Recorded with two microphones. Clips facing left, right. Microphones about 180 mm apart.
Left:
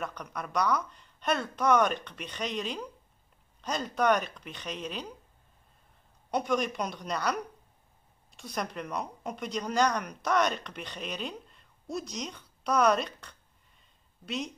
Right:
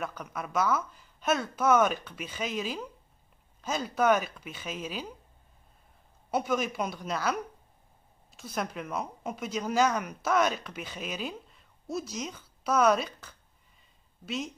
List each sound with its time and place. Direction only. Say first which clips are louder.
0.0 s speech: right 1 dB; 5° right (ahead or behind)
6.3 s speech: even; 5° right (ahead or behind)